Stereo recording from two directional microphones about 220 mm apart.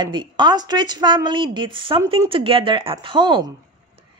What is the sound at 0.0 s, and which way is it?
Speech, 20° right (ahead or behind).